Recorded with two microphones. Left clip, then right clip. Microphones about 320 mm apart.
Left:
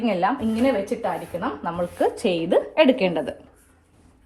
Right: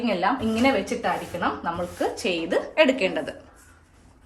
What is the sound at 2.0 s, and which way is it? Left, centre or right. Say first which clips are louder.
A woman's voice: left 6 dB; centre.